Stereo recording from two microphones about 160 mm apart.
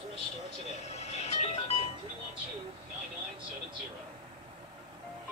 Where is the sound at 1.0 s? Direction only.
40° left (ahead or behind).